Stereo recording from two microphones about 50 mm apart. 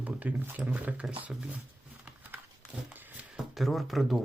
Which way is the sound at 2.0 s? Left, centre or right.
Right.